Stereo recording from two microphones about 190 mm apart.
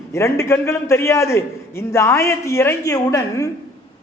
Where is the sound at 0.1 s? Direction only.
15° left (ahead or behind).